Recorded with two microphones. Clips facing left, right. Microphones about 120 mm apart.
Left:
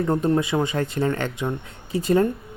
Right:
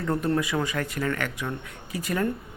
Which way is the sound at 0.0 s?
25° left (ahead or behind).